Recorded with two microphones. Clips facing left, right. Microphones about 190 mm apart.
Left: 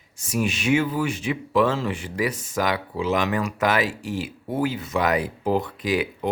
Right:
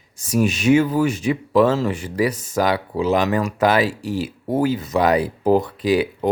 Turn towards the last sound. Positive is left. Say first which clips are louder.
# right 6 dB
turn(degrees=-35)  # may be behind; listen again after turning